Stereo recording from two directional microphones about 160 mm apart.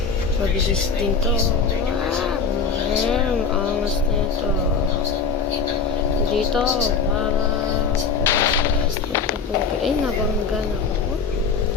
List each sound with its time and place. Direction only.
8.3 s music: 15° left (ahead or behind)